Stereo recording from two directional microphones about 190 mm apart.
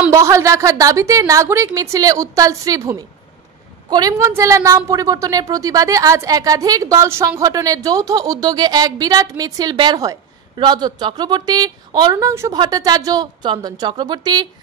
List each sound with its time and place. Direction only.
0.1 s a woman's voice: 15° right (ahead or behind)